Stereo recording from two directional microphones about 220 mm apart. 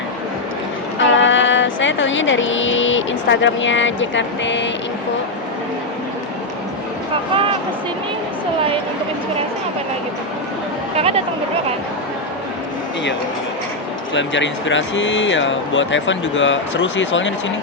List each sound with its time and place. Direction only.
0.9 s a sound: 60° left (ahead or behind)
10.9 s speech: 30° right (ahead or behind)
14.1 s speech: 55° left (ahead or behind)